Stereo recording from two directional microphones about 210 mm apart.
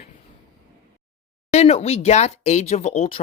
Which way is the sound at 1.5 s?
30° left (ahead or behind).